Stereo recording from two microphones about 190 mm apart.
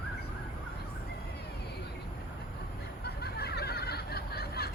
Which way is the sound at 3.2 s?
55° left (ahead or behind).